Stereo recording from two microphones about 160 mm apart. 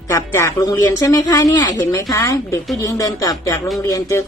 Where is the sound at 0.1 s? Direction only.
20° left (ahead or behind).